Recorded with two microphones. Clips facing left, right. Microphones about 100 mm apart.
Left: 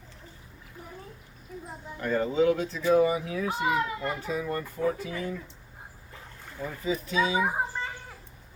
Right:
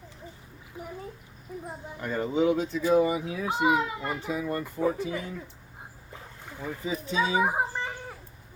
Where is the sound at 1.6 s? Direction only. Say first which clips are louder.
Left 4 dB; 15° right (ahead or behind).